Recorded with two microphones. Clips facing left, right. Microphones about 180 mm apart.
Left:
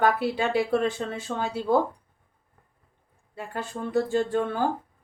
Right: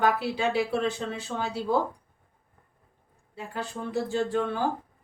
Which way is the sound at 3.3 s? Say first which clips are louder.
Left 1 dB; 50° left (ahead or behind).